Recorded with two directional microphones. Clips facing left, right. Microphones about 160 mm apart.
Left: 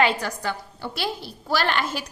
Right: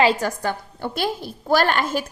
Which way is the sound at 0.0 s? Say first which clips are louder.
Right 4 dB; 45° right (ahead or behind).